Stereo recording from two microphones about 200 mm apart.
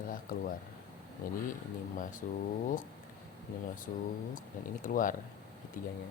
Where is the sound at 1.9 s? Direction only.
40° left (ahead or behind).